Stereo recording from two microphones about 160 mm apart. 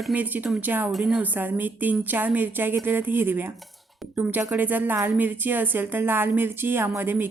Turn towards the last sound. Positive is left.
turn(degrees=-15)  # may be behind; listen again after turning